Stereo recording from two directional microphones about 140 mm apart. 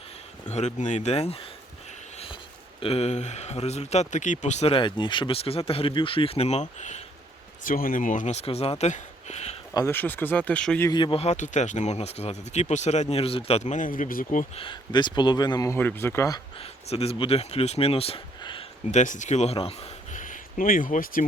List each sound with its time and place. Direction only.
0.4 s speech: 55° left (ahead or behind)
2.1 s a sound: 40° left (ahead or behind)
2.8 s speech: 45° left (ahead or behind)
4.7 s speech: 35° left (ahead or behind); by 7.0 s 55° left (ahead or behind)
7.6 s speech: 80° left; by 8.9 s 45° left (ahead or behind)
8.9 s a sound: 50° left (ahead or behind)
9.7 s speech: 15° left (ahead or behind)
10.9 s speech: 35° left (ahead or behind)
11.2 s speech: 55° left (ahead or behind); by 14.4 s 75° left (ahead or behind)
14.5 s speech: 40° left (ahead or behind); by 16.4 s 20° left (ahead or behind)
16.6 s speech: 45° left (ahead or behind)
18.9 s speech: 60° left (ahead or behind)
20.1 s a sound: 70° left (ahead or behind)